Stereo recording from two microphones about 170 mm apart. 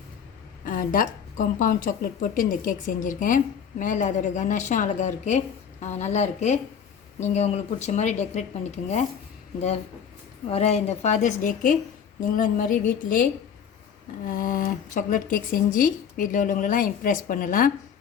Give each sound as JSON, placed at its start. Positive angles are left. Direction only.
{"t": 0.6, "sound": "a woman's voice", "side_deg": 55}
{"t": 10.5, "sound": "a woman's voice", "side_deg": 40}
{"t": 14.3, "sound": "a woman's voice", "side_deg": 55}